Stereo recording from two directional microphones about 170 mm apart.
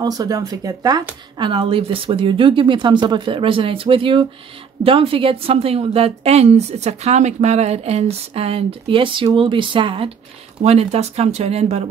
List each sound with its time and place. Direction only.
0.0 s a woman's voice: 20° right (ahead or behind); by 11.9 s 40° right (ahead or behind)